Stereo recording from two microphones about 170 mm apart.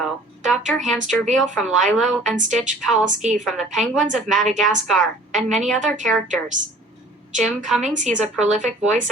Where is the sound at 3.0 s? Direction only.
45° right (ahead or behind).